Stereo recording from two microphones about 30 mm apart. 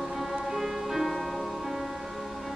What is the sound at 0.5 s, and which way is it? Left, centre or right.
Music, centre.